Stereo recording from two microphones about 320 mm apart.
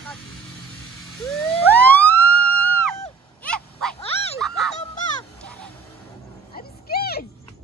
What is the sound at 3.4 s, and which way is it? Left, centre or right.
Dog, centre.